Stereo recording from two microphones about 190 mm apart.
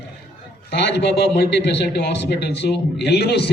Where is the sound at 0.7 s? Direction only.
65° left (ahead or behind).